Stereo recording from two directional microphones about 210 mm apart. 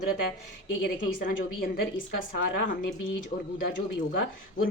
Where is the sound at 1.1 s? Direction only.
45° left (ahead or behind).